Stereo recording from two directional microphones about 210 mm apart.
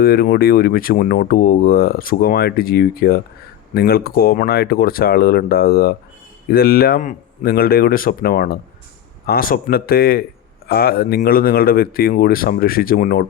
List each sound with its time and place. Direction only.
0.0 s speech: 45° left (ahead or behind)